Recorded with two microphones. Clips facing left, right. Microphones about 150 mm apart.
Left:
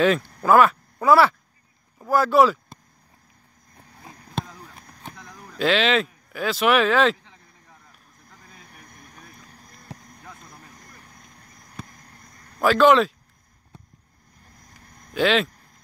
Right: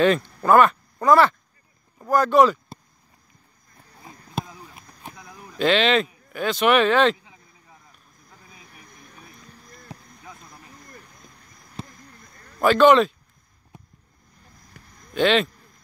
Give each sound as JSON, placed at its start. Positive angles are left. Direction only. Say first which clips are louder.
{"t": 0.0, "sound": "speech", "louder": "right 1 dB", "side_deg": 0}
{"t": 4.4, "sound": "a sound", "louder": "even", "side_deg": -5}
{"t": 5.6, "sound": "speech", "louder": "right 1 dB", "side_deg": 0}
{"t": 8.3, "sound": "vehicle", "louder": "even", "side_deg": -5}
{"t": 8.8, "sound": "vehicle", "louder": "even", "side_deg": 50}
{"t": 11.8, "sound": "a sound", "louder": "right 3 dB", "side_deg": -25}
{"t": 12.5, "sound": "speech", "louder": "right 1 dB", "side_deg": 0}
{"t": 13.7, "sound": "vehicle", "louder": "right 1 dB", "side_deg": -15}
{"t": 15.1, "sound": "speech", "louder": "right 1 dB", "side_deg": 5}